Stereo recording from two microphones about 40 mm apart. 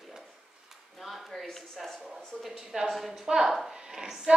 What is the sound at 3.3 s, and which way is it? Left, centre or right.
A woman's voice, centre.